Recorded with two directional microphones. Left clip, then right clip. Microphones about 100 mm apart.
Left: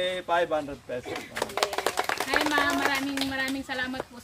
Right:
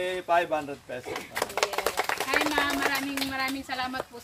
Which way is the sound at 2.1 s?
20° left (ahead or behind).